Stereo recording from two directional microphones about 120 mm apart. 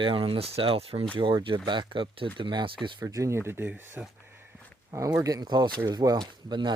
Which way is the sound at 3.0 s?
25° right (ahead or behind).